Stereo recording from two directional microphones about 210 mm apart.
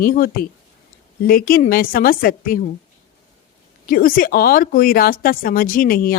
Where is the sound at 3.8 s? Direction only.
40° left (ahead or behind).